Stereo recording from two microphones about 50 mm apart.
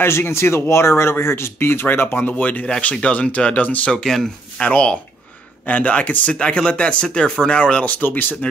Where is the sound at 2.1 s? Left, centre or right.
Left.